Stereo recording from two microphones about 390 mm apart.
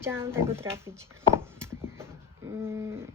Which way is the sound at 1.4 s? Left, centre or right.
Centre.